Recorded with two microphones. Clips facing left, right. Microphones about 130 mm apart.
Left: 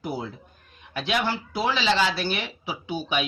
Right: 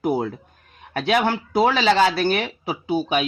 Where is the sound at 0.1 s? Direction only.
65° right (ahead or behind).